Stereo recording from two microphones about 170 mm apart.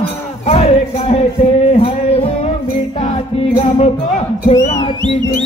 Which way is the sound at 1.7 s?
35° left (ahead or behind).